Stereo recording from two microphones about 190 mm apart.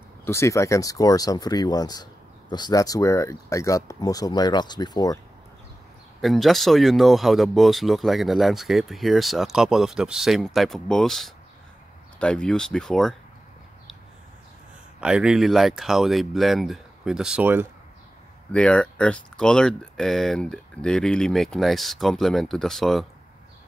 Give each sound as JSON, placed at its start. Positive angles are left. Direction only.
{"t": 0.2, "sound": "speech", "side_deg": 15}
{"t": 6.2, "sound": "speech", "side_deg": 0}
{"t": 15.0, "sound": "speech", "side_deg": -5}
{"t": 18.5, "sound": "speech", "side_deg": 5}